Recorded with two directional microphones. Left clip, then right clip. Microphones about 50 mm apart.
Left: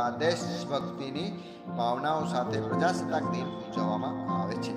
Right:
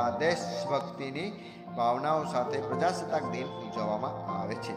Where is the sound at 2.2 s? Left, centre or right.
Left.